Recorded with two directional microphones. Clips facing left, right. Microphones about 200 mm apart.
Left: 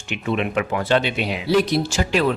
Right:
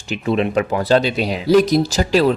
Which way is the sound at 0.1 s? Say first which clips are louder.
Right 5 dB; 35° right (ahead or behind).